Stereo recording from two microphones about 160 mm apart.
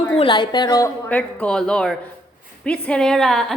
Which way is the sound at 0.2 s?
30° left (ahead or behind).